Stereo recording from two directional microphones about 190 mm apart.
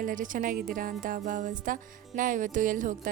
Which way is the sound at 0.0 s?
45° right (ahead or behind).